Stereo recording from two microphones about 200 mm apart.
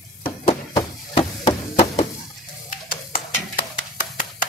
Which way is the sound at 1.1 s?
30° left (ahead or behind).